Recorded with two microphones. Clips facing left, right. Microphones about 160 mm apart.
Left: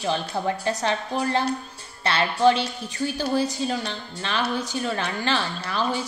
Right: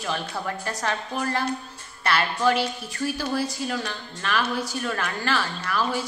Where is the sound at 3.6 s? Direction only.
25° left (ahead or behind).